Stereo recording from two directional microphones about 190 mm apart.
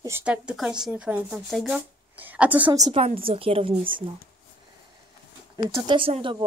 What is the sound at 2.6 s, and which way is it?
A woman's voice, 25° right (ahead or behind).